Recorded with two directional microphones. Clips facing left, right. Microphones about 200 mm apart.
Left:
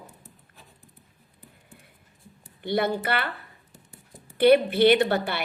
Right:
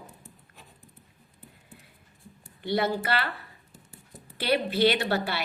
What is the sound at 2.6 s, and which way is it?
Speech, 55° left (ahead or behind).